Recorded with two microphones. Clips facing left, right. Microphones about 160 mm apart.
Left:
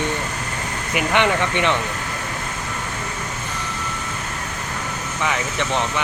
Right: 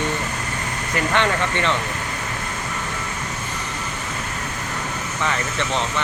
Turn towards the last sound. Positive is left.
turn(degrees=15)  # may be behind; listen again after turning